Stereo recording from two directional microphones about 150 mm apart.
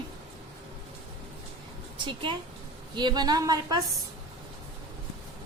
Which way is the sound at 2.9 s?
30° right (ahead or behind).